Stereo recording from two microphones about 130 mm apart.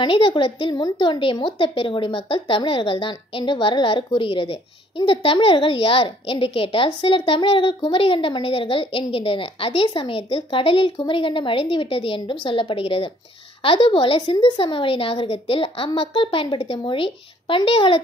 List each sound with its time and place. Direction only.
0.0 s a woman's voice: 40° left (ahead or behind)